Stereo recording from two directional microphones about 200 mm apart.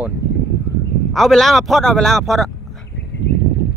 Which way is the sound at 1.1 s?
Centre (ahead or behind).